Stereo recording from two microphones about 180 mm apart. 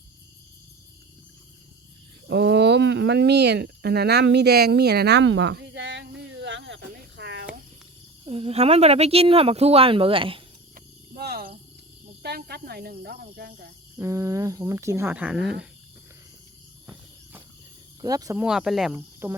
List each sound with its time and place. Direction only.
2.2 s a sound: 70° right (ahead or behind)
8.2 s speech: 30° right (ahead or behind)
10.8 s wild animals: 60° right (ahead or behind)
12.2 s speech: 65° right (ahead or behind)
14.0 s speech: 15° right (ahead or behind)
18.0 s speech: 20° right (ahead or behind)
18.3 s speech: 5° right (ahead or behind)
18.9 s speech: 15° right (ahead or behind)